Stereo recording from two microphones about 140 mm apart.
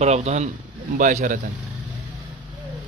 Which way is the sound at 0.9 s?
70° right (ahead or behind).